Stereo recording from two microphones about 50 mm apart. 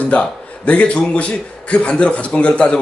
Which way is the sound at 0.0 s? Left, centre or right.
Left.